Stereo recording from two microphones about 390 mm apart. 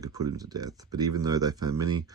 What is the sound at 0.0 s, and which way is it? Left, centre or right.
Speech, centre.